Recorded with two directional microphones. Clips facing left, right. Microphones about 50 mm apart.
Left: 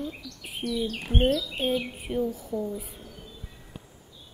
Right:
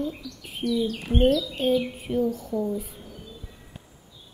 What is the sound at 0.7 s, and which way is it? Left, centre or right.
Speech, left.